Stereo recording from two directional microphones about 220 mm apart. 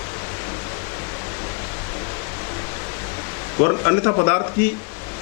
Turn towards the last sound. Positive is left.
turn(degrees=20)  # may be behind; listen again after turning